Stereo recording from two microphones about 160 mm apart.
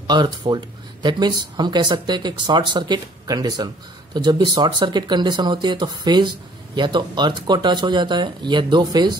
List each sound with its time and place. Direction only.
0.0 s speech: 25° right (ahead or behind)